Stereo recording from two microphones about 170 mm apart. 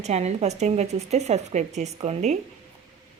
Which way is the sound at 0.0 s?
40° right (ahead or behind).